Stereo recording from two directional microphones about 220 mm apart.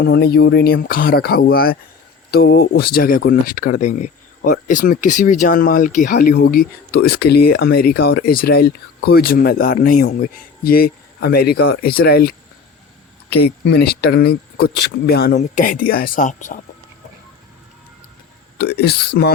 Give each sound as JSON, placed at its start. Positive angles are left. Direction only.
{"t": 0.0, "sound": "speech", "side_deg": 45}
{"t": 13.3, "sound": "speech", "side_deg": 50}
{"t": 18.5, "sound": "speech", "side_deg": 45}